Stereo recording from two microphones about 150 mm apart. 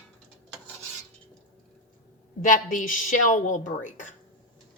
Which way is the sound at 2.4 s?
60° left (ahead or behind).